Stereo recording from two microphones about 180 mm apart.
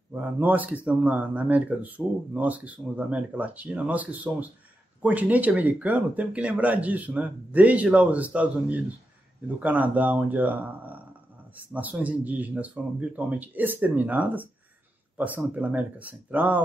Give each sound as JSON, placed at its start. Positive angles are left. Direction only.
{"t": 0.1, "sound": "speech", "side_deg": -10}